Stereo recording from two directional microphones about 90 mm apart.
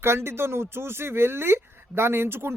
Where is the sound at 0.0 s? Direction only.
30° right (ahead or behind).